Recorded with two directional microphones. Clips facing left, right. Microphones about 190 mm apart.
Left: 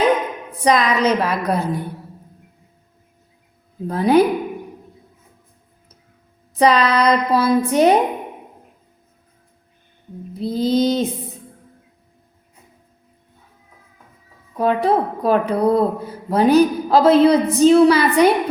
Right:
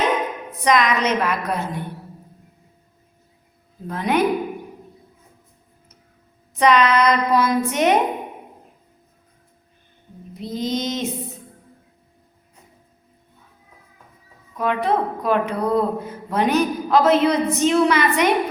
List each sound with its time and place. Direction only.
0.6 s a woman's voice: 35° left (ahead or behind)
3.8 s a woman's voice: 35° left (ahead or behind)
6.6 s a woman's voice: 35° left (ahead or behind)
10.3 s a woman's voice: 30° left (ahead or behind)
14.5 s a woman's voice: 35° left (ahead or behind)